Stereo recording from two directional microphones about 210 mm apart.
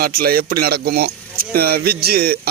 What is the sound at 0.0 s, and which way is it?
Speech, 45° right (ahead or behind).